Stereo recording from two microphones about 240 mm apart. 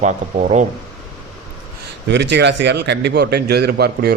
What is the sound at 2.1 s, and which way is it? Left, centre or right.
A man's voice, right.